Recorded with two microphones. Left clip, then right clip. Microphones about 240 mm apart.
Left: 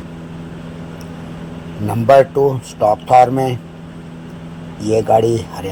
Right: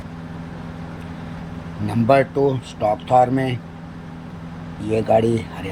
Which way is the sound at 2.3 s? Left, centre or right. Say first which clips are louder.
Left 5 dB; left.